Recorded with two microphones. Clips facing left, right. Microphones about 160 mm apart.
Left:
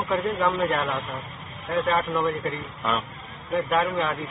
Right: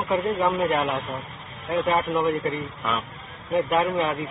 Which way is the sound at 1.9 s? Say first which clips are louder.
Right 3 dB; 20° right (ahead or behind).